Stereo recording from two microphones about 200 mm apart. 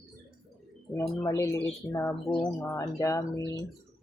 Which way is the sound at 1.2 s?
15° left (ahead or behind).